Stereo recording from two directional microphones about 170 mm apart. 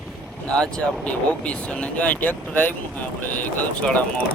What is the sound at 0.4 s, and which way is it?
Speech, 5° left (ahead or behind).